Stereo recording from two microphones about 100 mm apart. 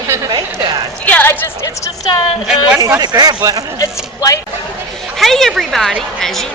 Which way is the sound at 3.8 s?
35° left (ahead or behind).